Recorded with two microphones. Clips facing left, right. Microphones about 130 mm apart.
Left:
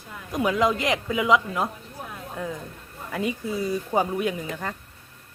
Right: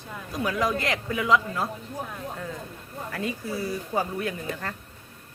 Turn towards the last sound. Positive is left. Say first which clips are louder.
# left 3 dB
turn(degrees=15)  # may be behind; listen again after turning